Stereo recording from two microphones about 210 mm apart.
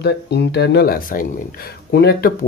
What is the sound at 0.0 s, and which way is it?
Speech, 50° left (ahead or behind).